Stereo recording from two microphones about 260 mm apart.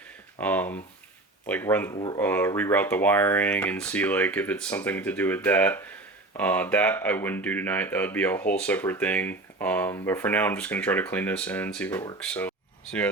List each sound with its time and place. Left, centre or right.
0.3 s speech: centre